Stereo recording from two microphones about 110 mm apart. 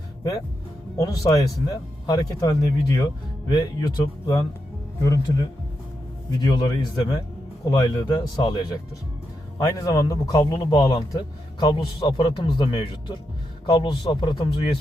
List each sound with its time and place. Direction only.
0.9 s a man's voice: 30° left (ahead or behind)